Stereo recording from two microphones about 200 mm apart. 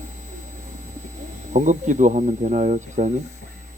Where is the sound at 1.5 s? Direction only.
40° right (ahead or behind).